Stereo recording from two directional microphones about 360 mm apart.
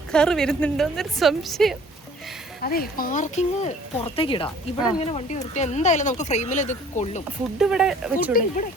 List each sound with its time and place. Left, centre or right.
0.1 s a woman's voice: centre
2.6 s speech: left
7.6 s a woman's voice: centre
8.1 s speech: left